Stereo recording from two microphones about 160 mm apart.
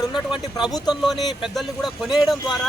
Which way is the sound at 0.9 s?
Centre (ahead or behind).